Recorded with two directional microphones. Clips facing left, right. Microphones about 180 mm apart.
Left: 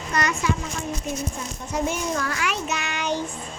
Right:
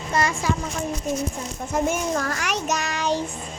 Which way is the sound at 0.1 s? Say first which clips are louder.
Right 1 dB; 30° right (ahead or behind).